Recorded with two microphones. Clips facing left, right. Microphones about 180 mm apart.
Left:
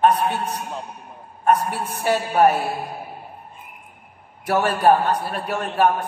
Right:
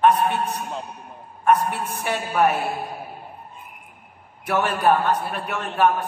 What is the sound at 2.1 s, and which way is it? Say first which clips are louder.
Speech: left 4 dB; 35° left (ahead or behind).